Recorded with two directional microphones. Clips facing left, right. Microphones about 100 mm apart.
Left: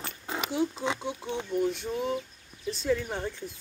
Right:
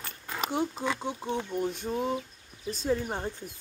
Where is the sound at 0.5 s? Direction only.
50° right (ahead or behind).